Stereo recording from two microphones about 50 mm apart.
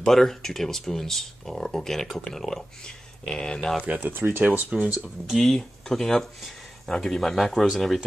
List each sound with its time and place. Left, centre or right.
0.0 s speech: centre
3.8 s speech: right
4.9 s speech: centre
5.3 s speech: centre